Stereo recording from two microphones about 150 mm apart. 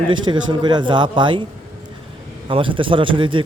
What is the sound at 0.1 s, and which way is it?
A man's voice, 30° right (ahead or behind).